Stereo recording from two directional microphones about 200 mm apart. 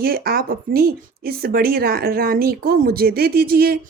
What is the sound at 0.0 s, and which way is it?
Speech, 50° right (ahead or behind).